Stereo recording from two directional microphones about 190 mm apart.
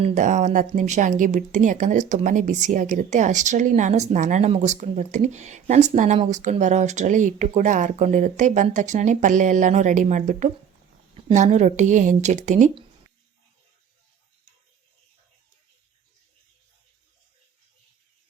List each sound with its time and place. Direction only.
0.0 s speech: 40° right (ahead or behind)